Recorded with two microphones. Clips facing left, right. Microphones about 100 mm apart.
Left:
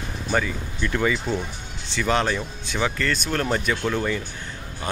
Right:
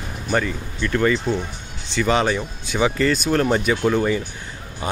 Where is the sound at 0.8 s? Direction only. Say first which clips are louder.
Right 4 dB; 5° left (ahead or behind).